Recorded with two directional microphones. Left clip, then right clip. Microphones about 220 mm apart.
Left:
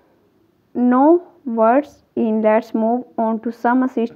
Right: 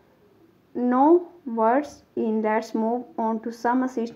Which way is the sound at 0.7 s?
45° left (ahead or behind).